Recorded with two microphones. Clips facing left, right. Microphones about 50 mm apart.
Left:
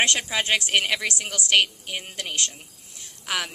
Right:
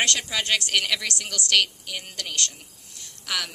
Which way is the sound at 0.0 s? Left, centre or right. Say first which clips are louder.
Left 2 dB; left.